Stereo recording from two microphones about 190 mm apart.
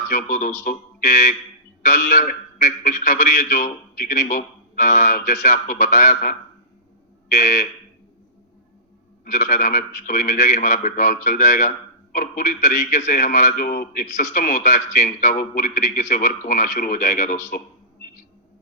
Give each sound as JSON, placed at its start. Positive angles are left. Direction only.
{"t": 0.1, "sound": "a man's voice", "side_deg": 40}
{"t": 7.3, "sound": "fire alarm", "side_deg": 40}
{"t": 9.2, "sound": "a man's voice", "side_deg": 40}